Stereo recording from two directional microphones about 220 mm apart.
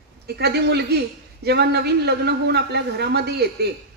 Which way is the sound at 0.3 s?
45° right (ahead or behind).